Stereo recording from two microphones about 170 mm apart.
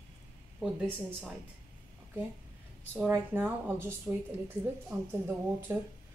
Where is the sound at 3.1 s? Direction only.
10° right (ahead or behind).